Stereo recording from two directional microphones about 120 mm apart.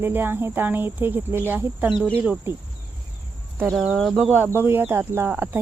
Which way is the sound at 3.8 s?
5° right (ahead or behind).